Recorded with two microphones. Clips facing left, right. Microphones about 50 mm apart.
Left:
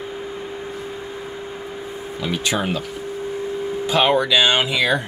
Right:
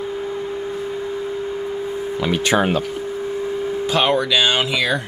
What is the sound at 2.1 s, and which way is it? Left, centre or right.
Speech, right.